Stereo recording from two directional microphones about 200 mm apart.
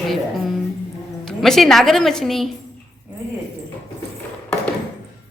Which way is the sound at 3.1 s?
10° right (ahead or behind).